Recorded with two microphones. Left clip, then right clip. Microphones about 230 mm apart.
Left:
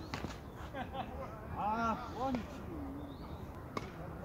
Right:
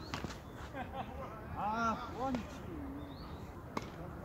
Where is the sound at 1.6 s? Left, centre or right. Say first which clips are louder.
Even; centre.